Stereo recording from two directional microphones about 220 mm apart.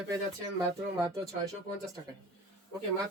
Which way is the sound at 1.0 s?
15° right (ahead or behind).